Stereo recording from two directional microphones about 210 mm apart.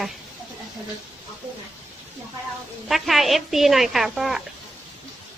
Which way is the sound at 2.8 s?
Centre (ahead or behind).